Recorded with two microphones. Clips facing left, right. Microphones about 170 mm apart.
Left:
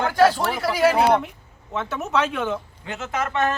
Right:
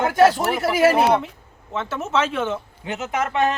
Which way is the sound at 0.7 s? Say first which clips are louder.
Right 1 dB; 5° right (ahead or behind).